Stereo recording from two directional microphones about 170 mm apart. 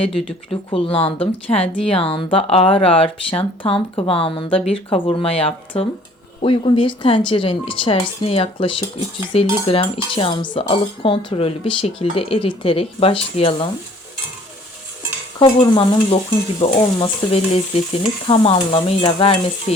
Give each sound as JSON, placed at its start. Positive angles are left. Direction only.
{"t": 0.1, "sound": "speech", "side_deg": 0}
{"t": 0.7, "sound": "a woman's voice", "side_deg": 35}
{"t": 15.4, "sound": "a woman's voice", "side_deg": 30}